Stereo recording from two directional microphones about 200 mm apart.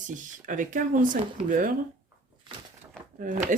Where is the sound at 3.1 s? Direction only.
40° right (ahead or behind).